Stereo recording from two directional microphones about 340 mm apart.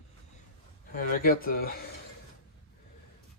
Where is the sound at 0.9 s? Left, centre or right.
Left.